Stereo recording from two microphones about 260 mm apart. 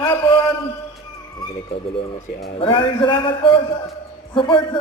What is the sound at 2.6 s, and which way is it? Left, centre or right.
A man's voice, centre.